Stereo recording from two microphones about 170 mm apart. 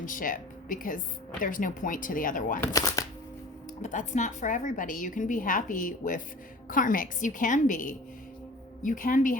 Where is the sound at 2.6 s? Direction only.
20° left (ahead or behind).